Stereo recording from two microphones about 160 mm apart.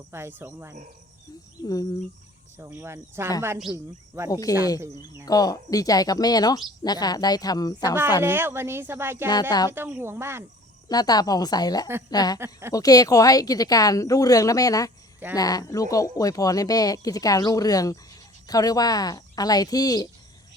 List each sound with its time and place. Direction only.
0.1 s speech: 15° right (ahead or behind)
1.6 s speech: 20° left (ahead or behind)
2.6 s speech: 15° right (ahead or behind)
4.3 s speech: 20° left (ahead or behind)
8.2 s speech: 15° right (ahead or behind)
9.2 s speech: 25° left (ahead or behind)
9.7 s speech: 15° right (ahead or behind)
10.8 s speech: 25° left (ahead or behind)
12.4 s speech: 15° right (ahead or behind)
12.7 s speech: 20° left (ahead or behind)